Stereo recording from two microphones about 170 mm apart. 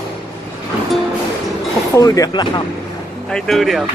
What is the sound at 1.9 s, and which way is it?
Speech, 20° left (ahead or behind).